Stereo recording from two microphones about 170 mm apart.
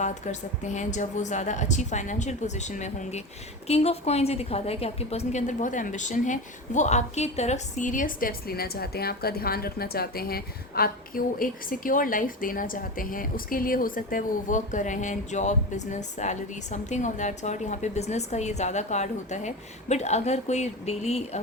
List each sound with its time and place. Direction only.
0.0 s a woman's voice: 45° left (ahead or behind)